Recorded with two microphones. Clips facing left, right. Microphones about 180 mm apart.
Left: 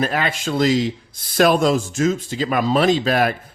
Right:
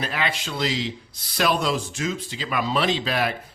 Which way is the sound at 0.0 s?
45° left (ahead or behind).